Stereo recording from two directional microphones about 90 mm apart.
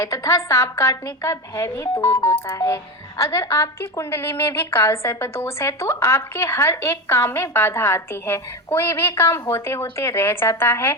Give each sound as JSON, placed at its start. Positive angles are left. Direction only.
{"t": 0.0, "sound": "a woman's voice", "side_deg": 35}